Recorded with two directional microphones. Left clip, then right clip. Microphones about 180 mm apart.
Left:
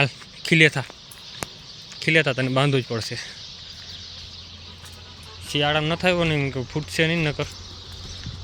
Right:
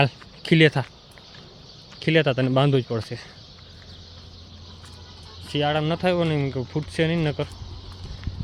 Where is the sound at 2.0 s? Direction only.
20° right (ahead or behind).